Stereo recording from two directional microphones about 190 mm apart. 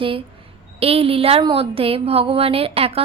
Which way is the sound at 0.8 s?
30° right (ahead or behind).